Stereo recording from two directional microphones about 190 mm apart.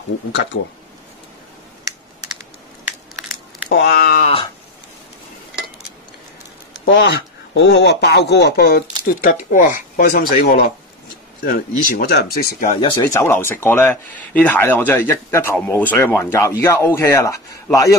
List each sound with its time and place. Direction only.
0.3 s speech: 70° left (ahead or behind)
3.6 s speech: 55° left (ahead or behind)
4.2 s a sound: 30° left (ahead or behind)
6.9 s speech: 70° left (ahead or behind); by 10.2 s 45° left (ahead or behind)
11.4 s speech: 50° left (ahead or behind)
12.1 s speech: 60° left (ahead or behind)
13.0 s speech: 15° left (ahead or behind)